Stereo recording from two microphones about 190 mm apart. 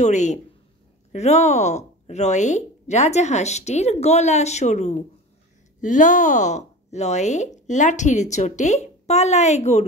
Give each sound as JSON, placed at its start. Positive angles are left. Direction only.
{"t": 0.0, "sound": "speech", "side_deg": 40}